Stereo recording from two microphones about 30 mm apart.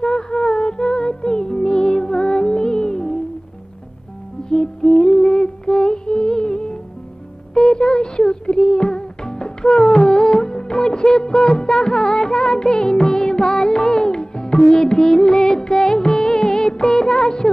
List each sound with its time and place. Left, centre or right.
0.4 s music: left
4.5 s music: left
9.2 s music of bollywood: left
14.6 s music: left